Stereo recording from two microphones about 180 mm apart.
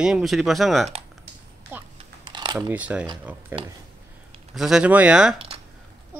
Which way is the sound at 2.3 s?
25° right (ahead or behind).